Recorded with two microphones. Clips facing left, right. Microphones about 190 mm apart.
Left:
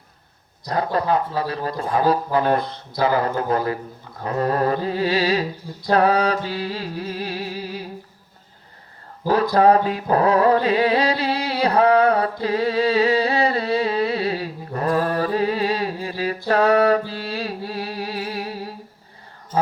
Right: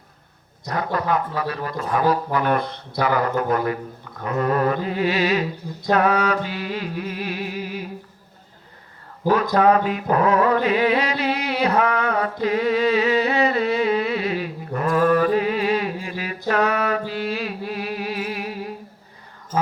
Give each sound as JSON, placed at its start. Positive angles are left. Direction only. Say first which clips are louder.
{"t": 0.7, "sound": "music", "louder": "left 2 dB", "side_deg": 30}
{"t": 1.9, "sound": "speech", "louder": "left 1 dB", "side_deg": 30}
{"t": 4.2, "sound": "music", "louder": "even", "side_deg": 35}
{"t": 9.6, "sound": "a sound", "louder": "left 4 dB", "side_deg": 35}